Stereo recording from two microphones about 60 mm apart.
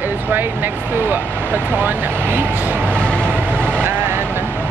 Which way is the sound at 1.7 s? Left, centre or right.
Right.